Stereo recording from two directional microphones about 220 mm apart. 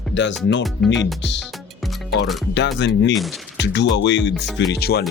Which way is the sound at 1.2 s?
50° left (ahead or behind).